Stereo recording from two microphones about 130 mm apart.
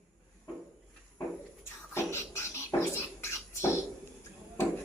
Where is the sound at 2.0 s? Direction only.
20° left (ahead or behind).